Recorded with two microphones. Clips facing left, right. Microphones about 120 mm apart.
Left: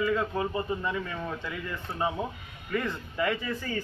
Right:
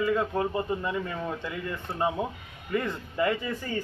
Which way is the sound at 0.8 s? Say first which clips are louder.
Right 1 dB; 15° right (ahead or behind).